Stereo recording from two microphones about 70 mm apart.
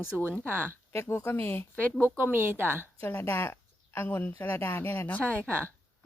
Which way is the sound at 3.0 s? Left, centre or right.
Left.